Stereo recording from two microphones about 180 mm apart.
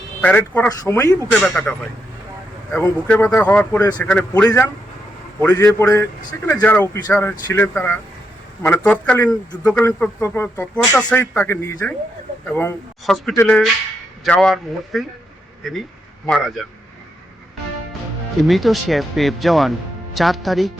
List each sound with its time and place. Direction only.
0.2 s speech: 10° left (ahead or behind)
1.3 s speech: centre (ahead or behind)
2.7 s speech: 15° left (ahead or behind)
3.7 s a man's voice: 20° left (ahead or behind)
3.9 s speech: 10° left (ahead or behind)
14.3 s speech: centre (ahead or behind)
18.4 s speech: centre (ahead or behind)